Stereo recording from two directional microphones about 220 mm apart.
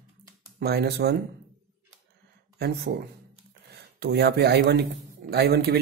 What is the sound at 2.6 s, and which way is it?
Speech, 50° right (ahead or behind).